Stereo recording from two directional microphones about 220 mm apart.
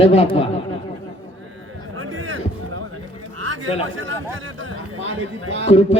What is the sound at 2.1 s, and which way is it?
Music, 65° right (ahead or behind).